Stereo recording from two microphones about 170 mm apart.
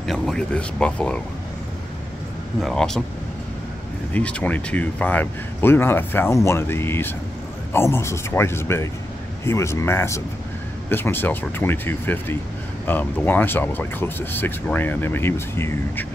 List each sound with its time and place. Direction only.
0.0 s speech: 5° left (ahead or behind)
2.6 s speech: 5° left (ahead or behind)
4.1 s speech: 10° left (ahead or behind)